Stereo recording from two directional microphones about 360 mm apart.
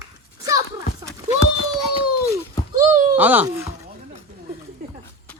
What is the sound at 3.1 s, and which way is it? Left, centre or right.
Speech, centre.